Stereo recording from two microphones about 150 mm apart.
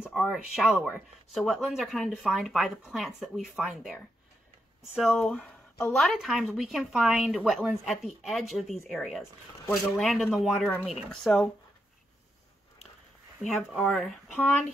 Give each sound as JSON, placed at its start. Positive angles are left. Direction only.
{"t": 0.0, "sound": "speech", "side_deg": 0}
{"t": 4.9, "sound": "speech", "side_deg": 5}
{"t": 13.5, "sound": "speech", "side_deg": 0}